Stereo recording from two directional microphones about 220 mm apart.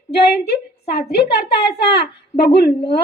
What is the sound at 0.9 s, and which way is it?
A woman's voice, 45° left (ahead or behind).